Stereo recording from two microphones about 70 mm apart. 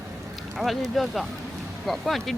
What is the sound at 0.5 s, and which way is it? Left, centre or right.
Speech, centre.